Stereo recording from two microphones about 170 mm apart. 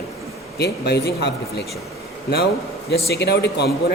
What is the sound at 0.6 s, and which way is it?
Speech, 80° left.